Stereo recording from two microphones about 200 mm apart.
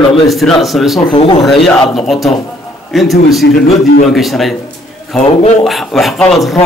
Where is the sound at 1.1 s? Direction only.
25° left (ahead or behind).